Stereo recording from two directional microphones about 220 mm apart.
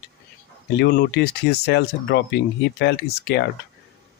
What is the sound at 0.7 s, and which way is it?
Speech, 50° left (ahead or behind).